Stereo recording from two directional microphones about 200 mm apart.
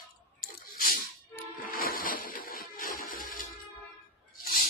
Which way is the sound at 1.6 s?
45° left (ahead or behind).